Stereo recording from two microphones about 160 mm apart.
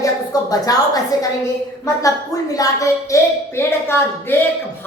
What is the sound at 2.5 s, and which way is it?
Speech, 20° left (ahead or behind).